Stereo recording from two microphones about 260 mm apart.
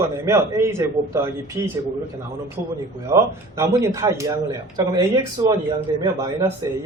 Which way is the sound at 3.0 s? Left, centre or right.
Centre.